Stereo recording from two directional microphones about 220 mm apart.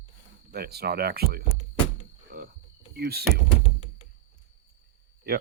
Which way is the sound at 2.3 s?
40° right (ahead or behind).